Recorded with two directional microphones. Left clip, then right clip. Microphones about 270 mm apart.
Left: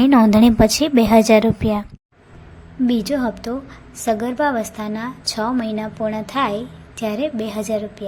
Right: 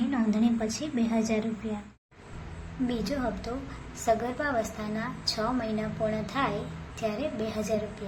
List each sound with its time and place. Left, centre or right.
0.1 s a woman's voice: left
2.8 s a woman's voice: left